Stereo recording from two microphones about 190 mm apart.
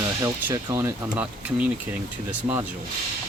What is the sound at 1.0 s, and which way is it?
Speech, 5° right (ahead or behind).